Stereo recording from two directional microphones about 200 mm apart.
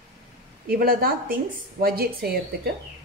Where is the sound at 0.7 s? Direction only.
45° right (ahead or behind).